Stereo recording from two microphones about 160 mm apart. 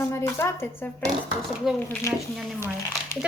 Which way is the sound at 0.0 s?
15° left (ahead or behind).